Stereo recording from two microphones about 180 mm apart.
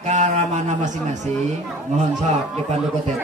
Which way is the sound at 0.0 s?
40° right (ahead or behind).